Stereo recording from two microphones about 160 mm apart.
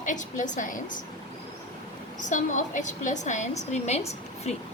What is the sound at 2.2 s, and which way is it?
A woman's voice, 50° left (ahead or behind).